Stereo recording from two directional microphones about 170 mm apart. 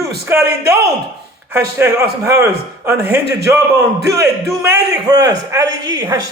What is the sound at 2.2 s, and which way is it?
A man's voice, 15° right (ahead or behind).